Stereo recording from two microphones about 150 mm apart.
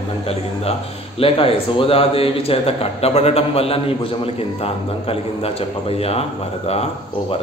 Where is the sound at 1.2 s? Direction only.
40° left (ahead or behind).